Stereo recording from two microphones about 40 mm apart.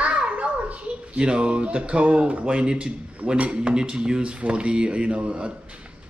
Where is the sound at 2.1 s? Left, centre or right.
Right.